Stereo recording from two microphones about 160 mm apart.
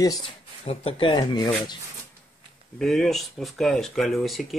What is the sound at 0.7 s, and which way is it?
Speech, 35° left (ahead or behind).